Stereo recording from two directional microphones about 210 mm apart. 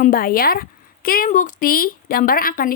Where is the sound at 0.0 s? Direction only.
45° left (ahead or behind).